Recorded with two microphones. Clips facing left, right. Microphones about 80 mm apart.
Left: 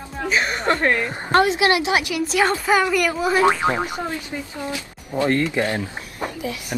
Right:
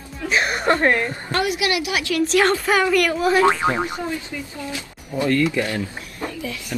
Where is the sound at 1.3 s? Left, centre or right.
Left.